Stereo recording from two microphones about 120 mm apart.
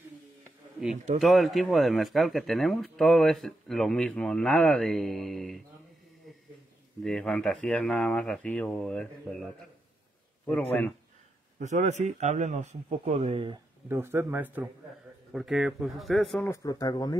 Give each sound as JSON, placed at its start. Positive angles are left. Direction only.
{"t": 1.2, "sound": "speech", "side_deg": 0}
{"t": 7.0, "sound": "speech", "side_deg": 5}
{"t": 10.4, "sound": "speech", "side_deg": 10}
{"t": 11.6, "sound": "a man's voice", "side_deg": -75}
{"t": 13.8, "sound": "a man's voice", "side_deg": -20}
{"t": 15.3, "sound": "speech", "side_deg": 0}
{"t": 16.3, "sound": "speech", "side_deg": 20}